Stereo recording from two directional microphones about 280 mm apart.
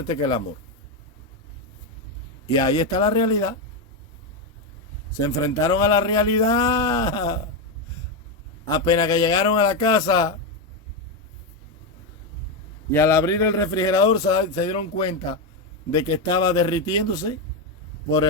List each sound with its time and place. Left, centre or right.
0.1 s a man's voice: centre
2.5 s a man's voice: centre
5.6 s a man's voice: centre
8.6 s a man's voice: centre
12.9 s a man's voice: centre